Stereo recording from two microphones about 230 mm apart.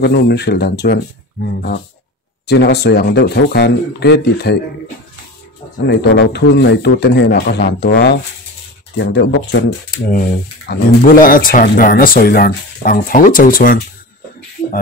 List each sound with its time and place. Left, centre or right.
0.0 s a man's voice: left
5.9 s a man's voice: left
10.0 s speech: left